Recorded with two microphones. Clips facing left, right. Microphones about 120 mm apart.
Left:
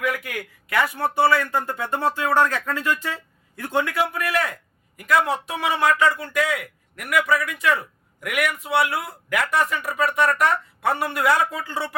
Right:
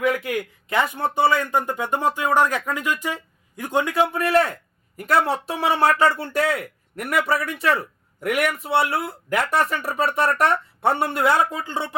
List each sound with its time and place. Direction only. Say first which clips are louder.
0.0 s a man's voice: right 5 dB; 20° right (ahead or behind)